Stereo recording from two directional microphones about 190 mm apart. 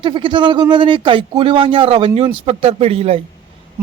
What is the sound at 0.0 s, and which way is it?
Speech, 25° right (ahead or behind).